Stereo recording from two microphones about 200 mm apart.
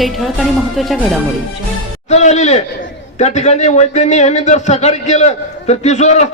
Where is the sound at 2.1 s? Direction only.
35° left (ahead or behind).